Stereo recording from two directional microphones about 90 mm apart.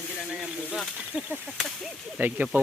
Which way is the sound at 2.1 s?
20° right (ahead or behind).